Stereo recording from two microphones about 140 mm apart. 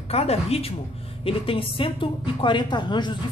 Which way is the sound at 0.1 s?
45° left (ahead or behind).